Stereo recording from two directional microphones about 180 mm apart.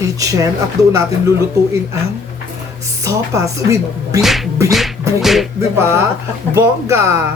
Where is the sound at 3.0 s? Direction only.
15° right (ahead or behind).